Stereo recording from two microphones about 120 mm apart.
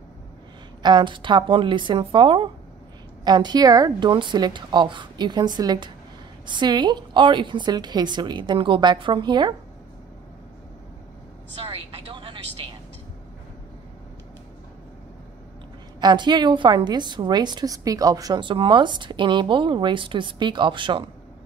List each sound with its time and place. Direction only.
0.8 s a woman's voice: 40° right (ahead or behind)
11.6 s vehicle: 50° right (ahead or behind)
16.0 s a woman's voice: 40° right (ahead or behind)